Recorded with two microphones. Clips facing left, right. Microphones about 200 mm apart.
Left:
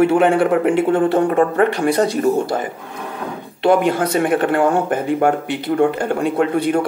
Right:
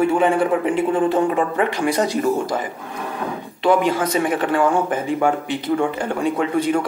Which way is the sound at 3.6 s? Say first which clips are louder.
Left 2 dB; 60° left (ahead or behind).